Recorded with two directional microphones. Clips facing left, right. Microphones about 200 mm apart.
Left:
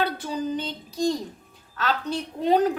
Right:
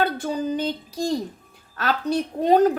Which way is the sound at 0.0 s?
50° right (ahead or behind).